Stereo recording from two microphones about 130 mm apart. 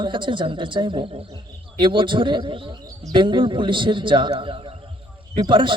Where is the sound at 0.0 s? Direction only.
40° right (ahead or behind).